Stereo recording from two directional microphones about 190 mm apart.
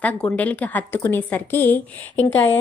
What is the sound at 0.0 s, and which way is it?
A woman's voice, 10° left (ahead or behind).